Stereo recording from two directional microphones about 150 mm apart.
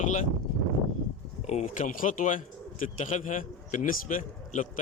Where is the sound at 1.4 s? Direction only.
55° left (ahead or behind).